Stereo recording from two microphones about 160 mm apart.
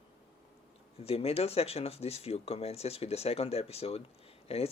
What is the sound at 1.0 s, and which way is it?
Speech, 40° left (ahead or behind).